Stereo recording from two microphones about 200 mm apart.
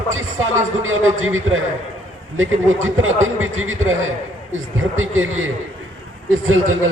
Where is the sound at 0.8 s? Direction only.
90° right.